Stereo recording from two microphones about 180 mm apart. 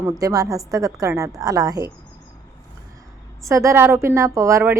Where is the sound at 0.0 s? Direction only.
20° right (ahead or behind).